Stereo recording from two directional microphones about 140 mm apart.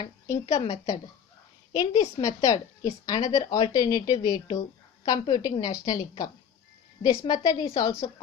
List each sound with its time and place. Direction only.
0.3 s a woman's voice: 50° left (ahead or behind)
1.7 s a woman's voice: 30° left (ahead or behind)